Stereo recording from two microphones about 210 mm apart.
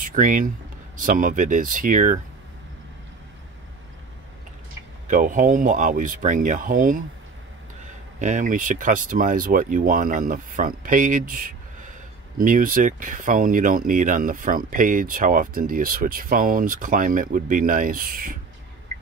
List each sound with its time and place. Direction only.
0.0 s speech: 40° right (ahead or behind)
5.0 s speech: 40° right (ahead or behind)
8.2 s speech: 35° right (ahead or behind)